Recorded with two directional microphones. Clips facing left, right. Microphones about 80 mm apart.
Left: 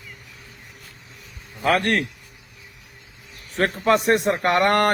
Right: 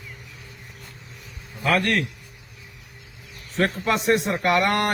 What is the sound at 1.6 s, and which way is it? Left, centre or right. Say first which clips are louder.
Speech: left 2 dB; left.